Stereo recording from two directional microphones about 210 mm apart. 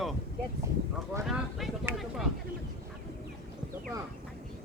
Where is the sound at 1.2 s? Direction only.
Centre (ahead or behind).